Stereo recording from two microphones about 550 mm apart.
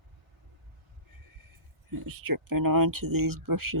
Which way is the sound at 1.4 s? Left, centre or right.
Right.